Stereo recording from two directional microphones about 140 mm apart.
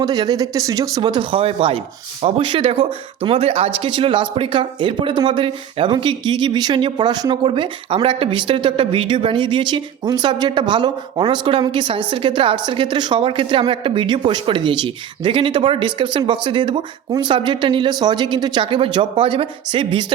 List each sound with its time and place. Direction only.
0.0 s speech: 30° right (ahead or behind)